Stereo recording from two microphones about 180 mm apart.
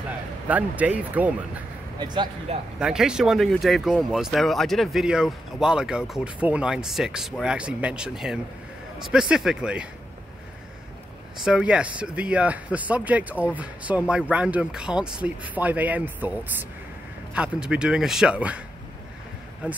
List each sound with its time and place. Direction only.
0.5 s speech: 10° right (ahead or behind)
2.0 s speech: 25° right (ahead or behind)
2.8 s speech: 5° right (ahead or behind)
11.4 s speech: 5° right (ahead or behind)
17.3 s speech: 5° right (ahead or behind)
19.6 s speech: 5° right (ahead or behind)